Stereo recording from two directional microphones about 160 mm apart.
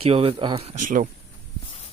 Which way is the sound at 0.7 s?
55° right (ahead or behind).